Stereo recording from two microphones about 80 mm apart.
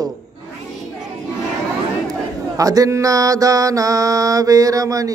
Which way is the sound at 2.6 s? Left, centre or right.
Right.